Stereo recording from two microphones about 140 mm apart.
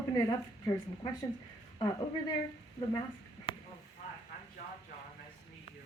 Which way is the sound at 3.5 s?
35° left (ahead or behind).